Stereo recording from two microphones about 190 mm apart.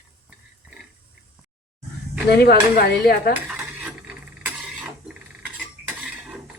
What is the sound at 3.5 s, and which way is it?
Mechanisms, 5° right (ahead or behind).